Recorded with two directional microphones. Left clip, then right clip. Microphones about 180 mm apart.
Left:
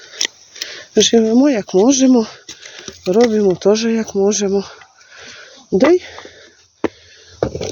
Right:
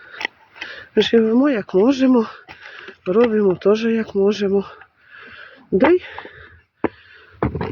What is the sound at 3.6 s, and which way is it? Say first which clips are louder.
Speech: left 2 dB; 15° left (ahead or behind).